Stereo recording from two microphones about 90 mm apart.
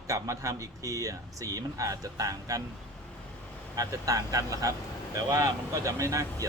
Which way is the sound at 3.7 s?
40° right (ahead or behind).